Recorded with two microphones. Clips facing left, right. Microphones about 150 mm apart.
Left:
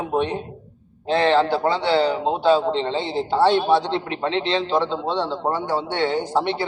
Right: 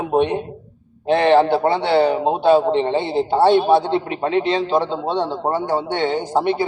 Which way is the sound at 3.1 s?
15° right (ahead or behind).